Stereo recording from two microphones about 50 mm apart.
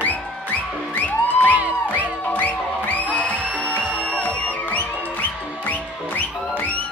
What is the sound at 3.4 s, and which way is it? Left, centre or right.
Music, right.